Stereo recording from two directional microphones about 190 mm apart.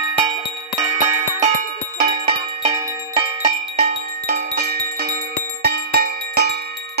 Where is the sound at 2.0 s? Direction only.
30° right (ahead or behind).